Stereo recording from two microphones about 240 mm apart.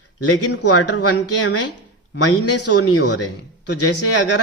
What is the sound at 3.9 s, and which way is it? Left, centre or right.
Speech, left.